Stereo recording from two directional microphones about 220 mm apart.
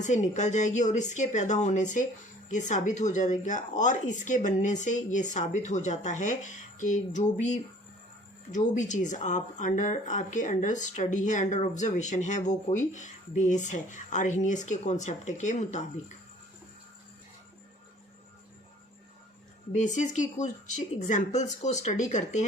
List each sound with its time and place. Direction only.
0.0 s speech: 30° left (ahead or behind)
19.7 s speech: 35° left (ahead or behind)